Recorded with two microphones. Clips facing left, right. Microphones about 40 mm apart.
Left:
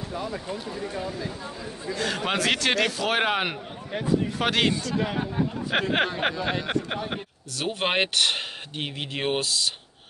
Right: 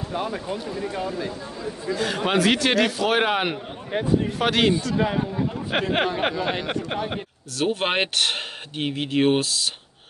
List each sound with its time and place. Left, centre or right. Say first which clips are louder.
0.1 s speech: right 5 dB; right
0.7 s speech: right 4 dB; right
2.0 s speech: right 4 dB; centre
3.9 s speech: right 5 dB; right
4.4 s speech: right 5 dB; centre
4.9 s speech: right 4 dB; right
5.7 s speech: right 2 dB; centre
6.6 s a sound: right 1 dB; centre
7.1 s speech: right 2 dB; centre